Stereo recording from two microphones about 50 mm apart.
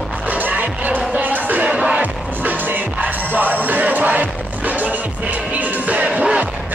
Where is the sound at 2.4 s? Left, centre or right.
Right.